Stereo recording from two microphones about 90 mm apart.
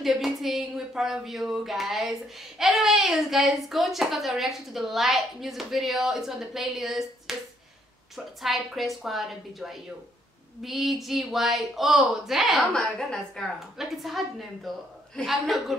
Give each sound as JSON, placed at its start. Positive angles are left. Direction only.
{"t": 0.0, "sound": "a woman's voice", "side_deg": -5}
{"t": 8.4, "sound": "a woman's voice", "side_deg": 0}